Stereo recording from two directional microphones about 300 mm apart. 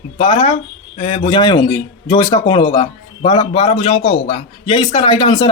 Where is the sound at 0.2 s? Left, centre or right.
Centre.